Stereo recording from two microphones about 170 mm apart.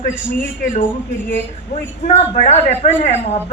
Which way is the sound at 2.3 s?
40° left (ahead or behind).